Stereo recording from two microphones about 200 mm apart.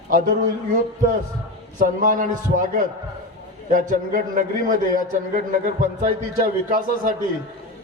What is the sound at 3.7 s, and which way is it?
A man's voice, 40° right (ahead or behind).